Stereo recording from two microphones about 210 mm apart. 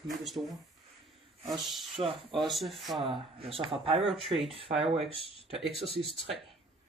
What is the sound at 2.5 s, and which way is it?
Speech, centre (ahead or behind).